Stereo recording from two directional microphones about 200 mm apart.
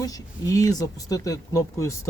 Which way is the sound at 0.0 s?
15° left (ahead or behind).